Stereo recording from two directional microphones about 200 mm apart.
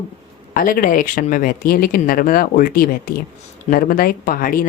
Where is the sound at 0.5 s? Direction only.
45° left (ahead or behind).